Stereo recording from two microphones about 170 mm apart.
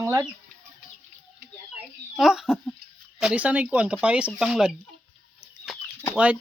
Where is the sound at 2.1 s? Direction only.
Centre (ahead or behind).